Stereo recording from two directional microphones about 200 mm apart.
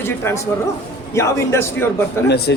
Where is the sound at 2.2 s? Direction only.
55° left (ahead or behind).